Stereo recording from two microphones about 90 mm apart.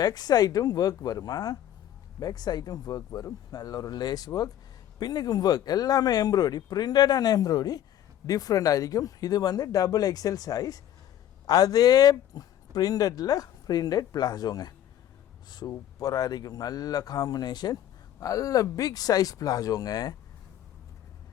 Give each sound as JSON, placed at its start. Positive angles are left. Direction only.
{"t": 0.0, "sound": "speech", "side_deg": 45}
{"t": 18.2, "sound": "speech", "side_deg": 40}